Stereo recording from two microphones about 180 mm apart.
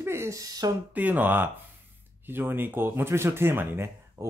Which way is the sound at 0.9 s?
10° right (ahead or behind).